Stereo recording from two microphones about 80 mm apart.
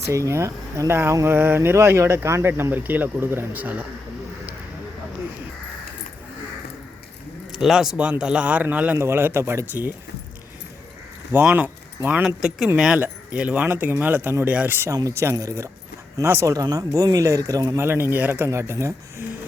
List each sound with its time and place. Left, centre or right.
0.1 s speech: right
7.5 s speech: centre
9.0 s speech: right
11.5 s speech: right
12.2 s speech: centre
14.9 s speech: right
16.6 s speech: right
17.7 s speech: right